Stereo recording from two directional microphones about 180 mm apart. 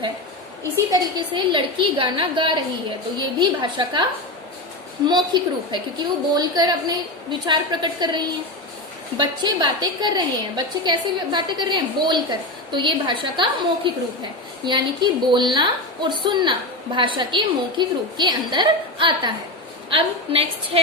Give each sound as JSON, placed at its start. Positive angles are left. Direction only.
{"t": 0.9, "sound": "a woman's voice", "side_deg": -25}
{"t": 5.0, "sound": "a woman's voice", "side_deg": -25}